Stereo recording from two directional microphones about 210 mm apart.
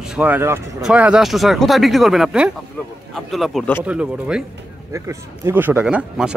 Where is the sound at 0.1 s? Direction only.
5° right (ahead or behind).